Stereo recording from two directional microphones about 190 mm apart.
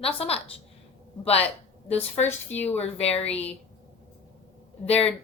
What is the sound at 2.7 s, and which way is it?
Speech, 35° left (ahead or behind).